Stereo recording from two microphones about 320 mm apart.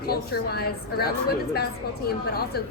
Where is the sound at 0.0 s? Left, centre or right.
Left.